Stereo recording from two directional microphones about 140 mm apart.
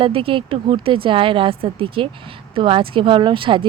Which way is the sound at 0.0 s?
40° right (ahead or behind).